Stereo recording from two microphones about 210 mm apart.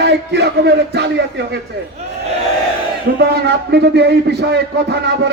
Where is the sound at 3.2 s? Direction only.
50° right (ahead or behind).